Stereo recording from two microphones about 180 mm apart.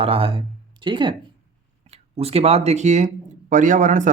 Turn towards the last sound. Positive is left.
turn(degrees=-45)  # may be behind; listen again after turning